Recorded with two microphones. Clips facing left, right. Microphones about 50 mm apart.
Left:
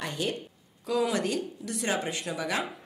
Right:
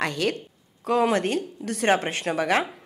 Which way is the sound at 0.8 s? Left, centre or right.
Right.